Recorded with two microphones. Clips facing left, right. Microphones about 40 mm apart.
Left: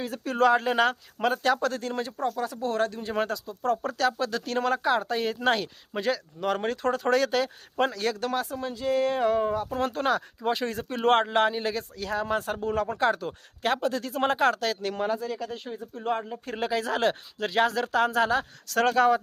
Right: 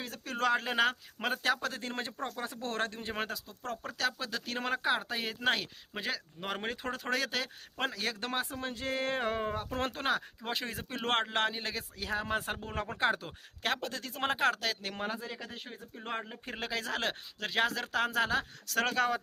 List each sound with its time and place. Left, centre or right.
0.0 s speech: centre
1.8 s speech: right
3.1 s speech: centre
4.6 s speech: centre
8.2 s speech: right
8.6 s speech: right
9.9 s speech: centre
11.9 s speech: centre
13.2 s speech: centre; by 15.4 s right
15.4 s speech: centre
16.6 s speech: centre